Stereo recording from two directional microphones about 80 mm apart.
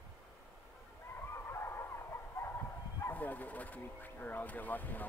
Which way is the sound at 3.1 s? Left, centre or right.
Left.